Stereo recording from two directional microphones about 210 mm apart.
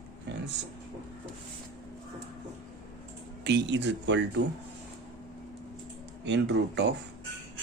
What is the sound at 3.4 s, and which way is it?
Speech, 55° right (ahead or behind).